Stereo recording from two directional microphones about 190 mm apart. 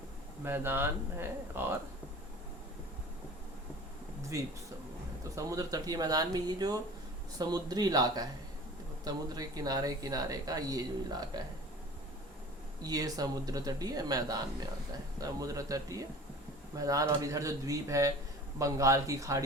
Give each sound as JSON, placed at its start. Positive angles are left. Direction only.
{"t": 0.4, "sound": "speech", "side_deg": -10}
{"t": 5.3, "sound": "speech", "side_deg": -15}
{"t": 12.8, "sound": "speech", "side_deg": -20}